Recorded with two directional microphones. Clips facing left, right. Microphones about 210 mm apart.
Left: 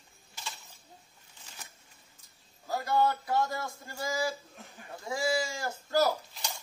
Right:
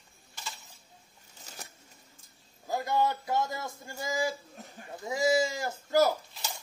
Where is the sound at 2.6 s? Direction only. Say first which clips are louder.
Left 1 dB; 20° right (ahead or behind).